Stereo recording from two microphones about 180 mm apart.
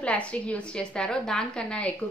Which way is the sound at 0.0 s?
5° left (ahead or behind).